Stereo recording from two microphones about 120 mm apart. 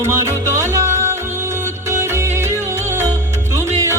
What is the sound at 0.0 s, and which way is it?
Music, 20° right (ahead or behind).